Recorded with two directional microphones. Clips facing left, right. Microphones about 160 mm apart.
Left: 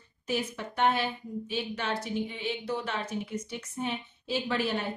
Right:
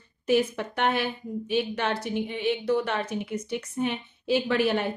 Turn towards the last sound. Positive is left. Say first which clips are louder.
# right 6 dB
turn(degrees=-65)  # may be behind; listen again after turning